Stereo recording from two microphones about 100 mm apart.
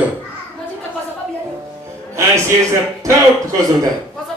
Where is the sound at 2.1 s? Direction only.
25° right (ahead or behind).